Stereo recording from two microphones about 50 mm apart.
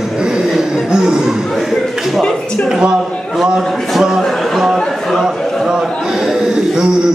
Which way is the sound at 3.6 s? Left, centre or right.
Centre.